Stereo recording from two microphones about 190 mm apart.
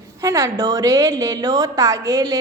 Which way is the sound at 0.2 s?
15° right (ahead or behind).